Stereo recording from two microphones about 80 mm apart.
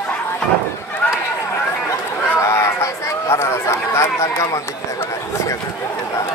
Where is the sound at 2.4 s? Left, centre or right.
Left.